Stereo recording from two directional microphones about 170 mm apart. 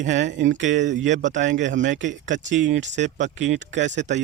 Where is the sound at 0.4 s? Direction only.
90° right.